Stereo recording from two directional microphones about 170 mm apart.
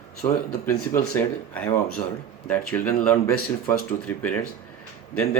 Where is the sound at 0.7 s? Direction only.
10° left (ahead or behind).